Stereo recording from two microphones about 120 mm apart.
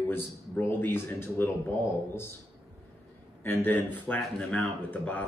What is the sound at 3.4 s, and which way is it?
Speech, 15° left (ahead or behind).